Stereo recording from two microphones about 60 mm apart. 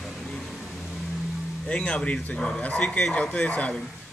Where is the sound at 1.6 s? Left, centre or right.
Centre.